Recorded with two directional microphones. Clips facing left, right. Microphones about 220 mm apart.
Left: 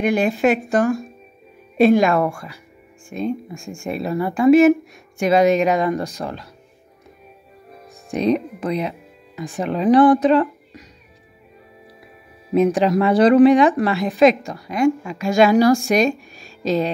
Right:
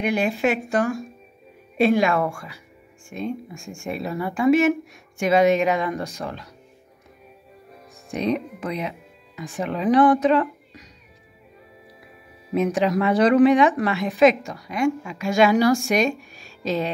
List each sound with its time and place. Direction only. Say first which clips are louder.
0.0 s a woman's voice: left 4 dB; 45° left (ahead or behind)
8.1 s a woman's voice: left 5 dB; 35° left (ahead or behind)
12.5 s a woman's voice: left 5 dB; 35° left (ahead or behind)